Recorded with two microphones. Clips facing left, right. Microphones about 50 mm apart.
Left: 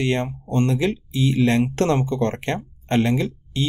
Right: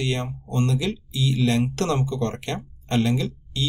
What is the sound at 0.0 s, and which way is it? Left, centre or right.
Speech, left.